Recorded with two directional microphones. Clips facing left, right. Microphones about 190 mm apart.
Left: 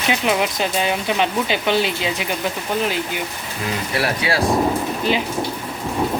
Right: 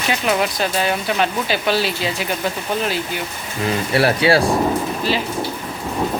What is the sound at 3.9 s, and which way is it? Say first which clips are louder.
Speech: right 7 dB; 30° right (ahead or behind).